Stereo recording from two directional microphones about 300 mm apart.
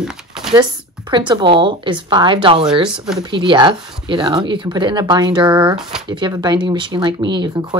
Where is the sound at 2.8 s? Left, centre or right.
Centre.